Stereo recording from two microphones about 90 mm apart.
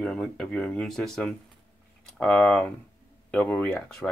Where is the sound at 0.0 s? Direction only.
5° left (ahead or behind).